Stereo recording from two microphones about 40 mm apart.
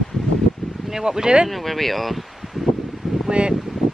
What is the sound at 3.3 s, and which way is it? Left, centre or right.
Speech, right.